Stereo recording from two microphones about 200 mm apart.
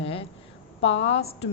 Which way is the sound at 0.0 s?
30° left (ahead or behind).